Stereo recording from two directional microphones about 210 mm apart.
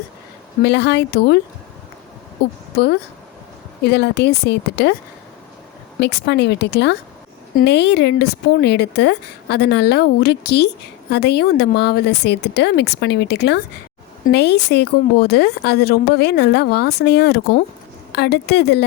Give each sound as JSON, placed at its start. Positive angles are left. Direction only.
{"t": 0.6, "sound": "a woman's voice", "side_deg": 55}
{"t": 2.7, "sound": "a woman's voice", "side_deg": 50}
{"t": 6.0, "sound": "a woman's voice", "side_deg": 55}